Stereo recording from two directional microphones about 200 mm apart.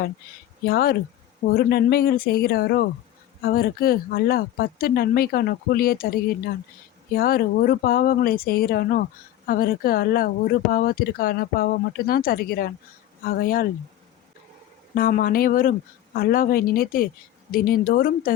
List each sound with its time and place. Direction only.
0.6 s speech: 50° left (ahead or behind)
14.9 s speech: 45° left (ahead or behind)